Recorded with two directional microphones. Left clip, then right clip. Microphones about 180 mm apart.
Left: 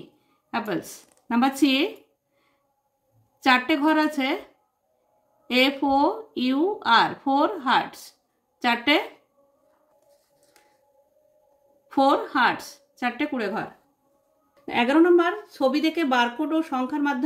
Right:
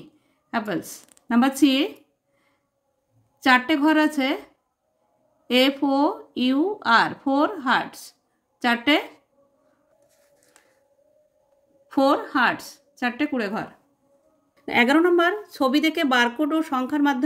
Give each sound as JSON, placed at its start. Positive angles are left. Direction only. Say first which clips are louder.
{"t": 0.5, "sound": "speech", "louder": "right 1 dB", "side_deg": -25}
{"t": 3.3, "sound": "speech", "louder": "right 2 dB", "side_deg": -20}
{"t": 5.5, "sound": "speech", "louder": "right 1 dB", "side_deg": -20}
{"t": 11.9, "sound": "speech", "louder": "even", "side_deg": -25}
{"t": 14.7, "sound": "a woman's voice", "louder": "even", "side_deg": -40}